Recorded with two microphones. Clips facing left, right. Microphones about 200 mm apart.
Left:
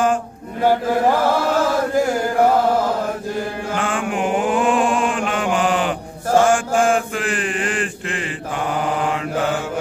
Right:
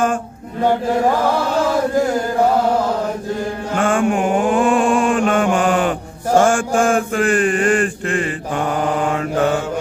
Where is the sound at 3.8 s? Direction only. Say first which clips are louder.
Right 7 dB; 45° right (ahead or behind).